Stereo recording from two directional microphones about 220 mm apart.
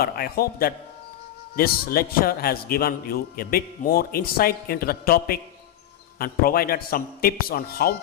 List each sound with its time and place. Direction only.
0.0 s a man's voice: 45° left (ahead or behind)